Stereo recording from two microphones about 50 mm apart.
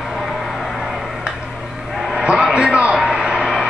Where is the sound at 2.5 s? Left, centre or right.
Right.